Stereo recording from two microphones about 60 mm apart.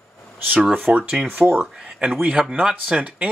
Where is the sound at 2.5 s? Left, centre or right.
Centre.